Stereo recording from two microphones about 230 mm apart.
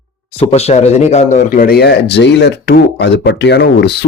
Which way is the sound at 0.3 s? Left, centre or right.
Left.